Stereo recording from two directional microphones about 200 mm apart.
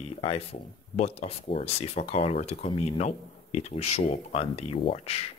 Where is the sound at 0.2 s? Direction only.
30° left (ahead or behind).